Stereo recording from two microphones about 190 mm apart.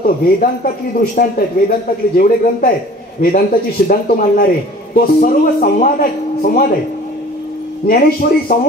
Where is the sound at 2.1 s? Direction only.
50° left (ahead or behind).